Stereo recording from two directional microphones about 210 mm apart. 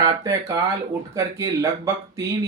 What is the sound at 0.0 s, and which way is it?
Speech, 15° right (ahead or behind).